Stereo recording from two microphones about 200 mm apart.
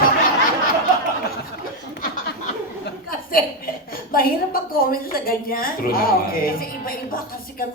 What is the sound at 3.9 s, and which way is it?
A woman's voice, 45° left (ahead or behind).